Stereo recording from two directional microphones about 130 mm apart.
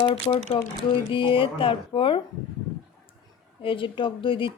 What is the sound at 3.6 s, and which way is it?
Speech, 40° left (ahead or behind).